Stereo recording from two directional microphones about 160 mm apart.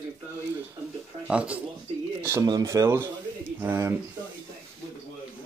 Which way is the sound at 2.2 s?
20° right (ahead or behind).